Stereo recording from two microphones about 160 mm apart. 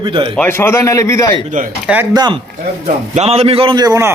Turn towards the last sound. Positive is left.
turn(degrees=-20)  # may be behind; listen again after turning